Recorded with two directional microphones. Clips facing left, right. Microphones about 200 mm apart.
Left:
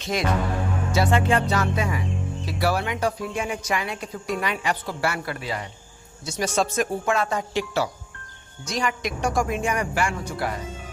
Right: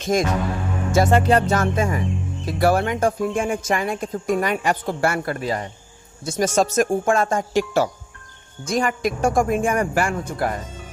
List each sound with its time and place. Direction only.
0.0 s a woman's voice: 45° right (ahead or behind)